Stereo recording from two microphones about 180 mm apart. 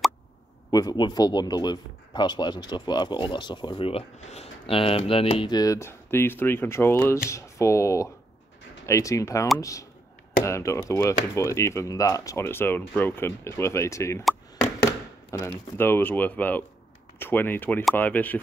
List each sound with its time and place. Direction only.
0.7 s speech: 20° left (ahead or behind)
15.3 s speech: 15° left (ahead or behind)